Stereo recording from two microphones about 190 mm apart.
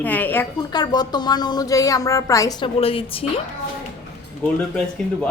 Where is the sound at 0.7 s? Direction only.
20° left (ahead or behind).